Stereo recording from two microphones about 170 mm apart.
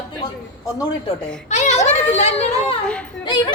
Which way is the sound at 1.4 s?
40° left (ahead or behind).